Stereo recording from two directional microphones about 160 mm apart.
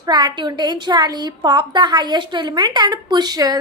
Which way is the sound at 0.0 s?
25° right (ahead or behind).